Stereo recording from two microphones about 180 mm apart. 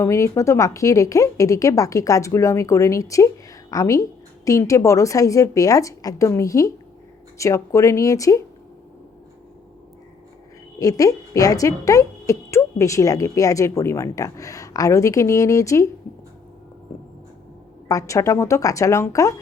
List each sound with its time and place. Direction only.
0.0 s a woman's voice: 15° left (ahead or behind)
10.8 s a woman's voice: 20° left (ahead or behind)
17.8 s a woman's voice: 20° left (ahead or behind)